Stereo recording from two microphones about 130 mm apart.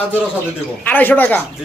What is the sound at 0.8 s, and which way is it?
Speech, 15° left (ahead or behind).